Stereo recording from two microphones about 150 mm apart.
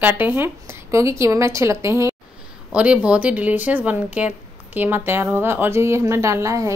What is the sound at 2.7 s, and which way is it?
A woman's voice, 10° right (ahead or behind).